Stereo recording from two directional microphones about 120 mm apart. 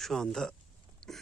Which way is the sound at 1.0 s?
5° left (ahead or behind).